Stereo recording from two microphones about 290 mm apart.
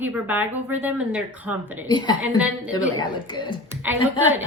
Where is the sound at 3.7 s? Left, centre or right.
Centre.